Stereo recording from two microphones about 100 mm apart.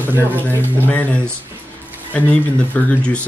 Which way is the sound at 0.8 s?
15° left (ahead or behind).